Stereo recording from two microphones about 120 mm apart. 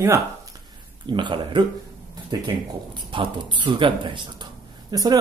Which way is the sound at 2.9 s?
45° right (ahead or behind).